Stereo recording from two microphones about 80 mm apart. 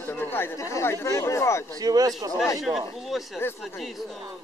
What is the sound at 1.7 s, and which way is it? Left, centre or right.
Speech, right.